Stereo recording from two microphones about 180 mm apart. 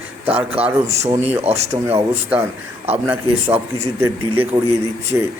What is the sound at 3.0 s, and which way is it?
Speech, 10° right (ahead or behind).